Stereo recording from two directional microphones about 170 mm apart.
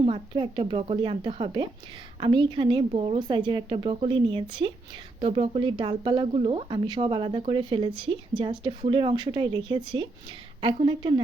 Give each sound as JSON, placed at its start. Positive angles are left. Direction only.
{"t": 0.0, "sound": "speech", "side_deg": -35}